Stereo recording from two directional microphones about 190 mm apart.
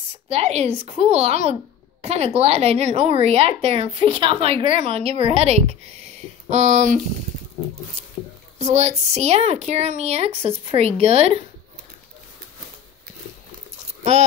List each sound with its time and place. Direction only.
0.3 s a child's voice: 35° right (ahead or behind)
8.5 s a child's voice: 35° right (ahead or behind)
14.1 s a child's voice: 35° right (ahead or behind)